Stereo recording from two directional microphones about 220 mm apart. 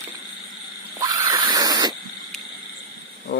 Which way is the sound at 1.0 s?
15° right (ahead or behind).